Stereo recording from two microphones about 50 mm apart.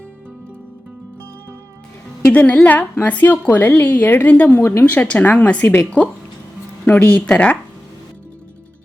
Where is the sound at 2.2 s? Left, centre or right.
Left.